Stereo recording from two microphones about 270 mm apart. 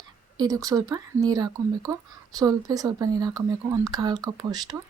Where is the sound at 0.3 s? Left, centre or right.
Centre.